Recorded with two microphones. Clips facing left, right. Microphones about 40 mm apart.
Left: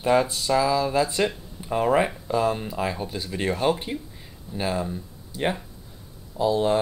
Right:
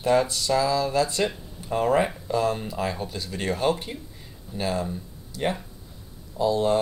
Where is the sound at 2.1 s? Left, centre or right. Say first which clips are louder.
Left 1 dB; centre.